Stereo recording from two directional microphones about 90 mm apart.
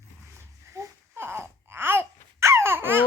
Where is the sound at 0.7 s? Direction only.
30° right (ahead or behind).